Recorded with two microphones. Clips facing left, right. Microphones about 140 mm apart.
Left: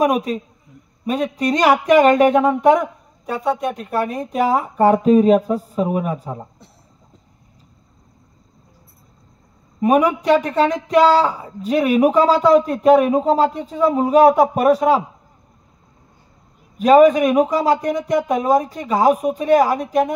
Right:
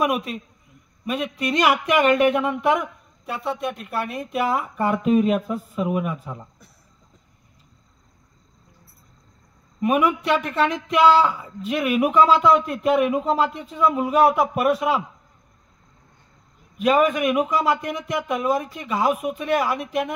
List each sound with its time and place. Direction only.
0.0 s speech: 40° left (ahead or behind)
9.8 s speech: 35° left (ahead or behind)
16.7 s speech: 35° left (ahead or behind)